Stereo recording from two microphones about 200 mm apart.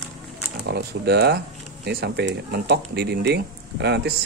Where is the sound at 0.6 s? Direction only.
55° right (ahead or behind).